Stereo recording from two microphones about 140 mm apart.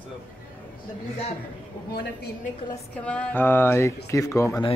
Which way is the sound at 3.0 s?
10° left (ahead or behind).